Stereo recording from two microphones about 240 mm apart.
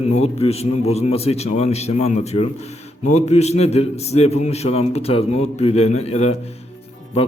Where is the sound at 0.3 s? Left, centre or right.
Left.